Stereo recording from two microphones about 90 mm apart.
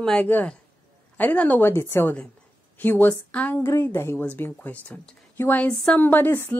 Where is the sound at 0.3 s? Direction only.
20° left (ahead or behind).